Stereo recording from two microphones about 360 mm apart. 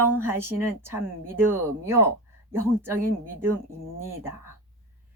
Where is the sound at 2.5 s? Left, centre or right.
Centre.